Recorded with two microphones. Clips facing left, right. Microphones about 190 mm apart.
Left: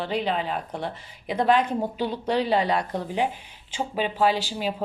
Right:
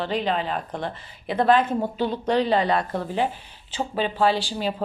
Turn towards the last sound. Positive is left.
turn(degrees=10)  # may be behind; listen again after turning